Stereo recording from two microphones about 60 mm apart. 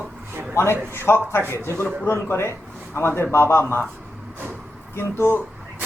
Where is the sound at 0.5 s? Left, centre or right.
Left.